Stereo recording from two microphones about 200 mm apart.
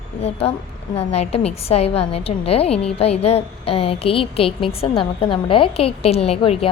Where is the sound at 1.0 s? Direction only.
30° left (ahead or behind).